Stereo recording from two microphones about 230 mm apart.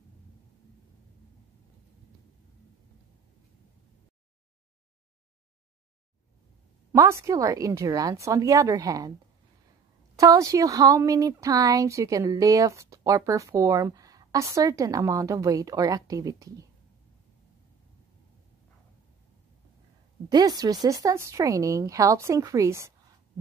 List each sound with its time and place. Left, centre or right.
6.9 s speech: centre
10.1 s speech: centre
20.2 s speech: centre